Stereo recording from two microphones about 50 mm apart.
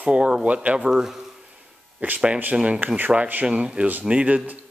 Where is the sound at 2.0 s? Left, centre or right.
Right.